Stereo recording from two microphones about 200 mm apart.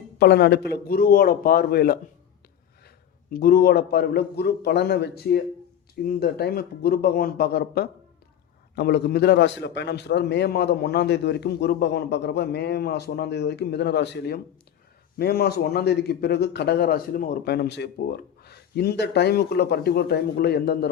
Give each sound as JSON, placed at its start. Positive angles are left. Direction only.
{"t": 0.2, "sound": "a man's voice", "side_deg": 55}
{"t": 3.3, "sound": "a man's voice", "side_deg": 50}